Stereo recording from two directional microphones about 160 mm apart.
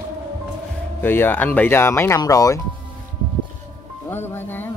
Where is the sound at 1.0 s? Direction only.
15° left (ahead or behind).